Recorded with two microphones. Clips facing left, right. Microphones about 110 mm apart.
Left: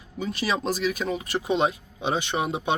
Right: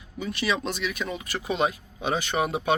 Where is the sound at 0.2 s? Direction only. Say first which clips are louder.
Left 1 dB; 30° left (ahead or behind).